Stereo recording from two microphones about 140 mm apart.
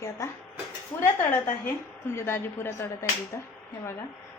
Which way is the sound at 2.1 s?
20° left (ahead or behind).